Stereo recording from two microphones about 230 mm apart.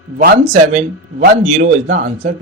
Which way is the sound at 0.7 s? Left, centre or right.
Right.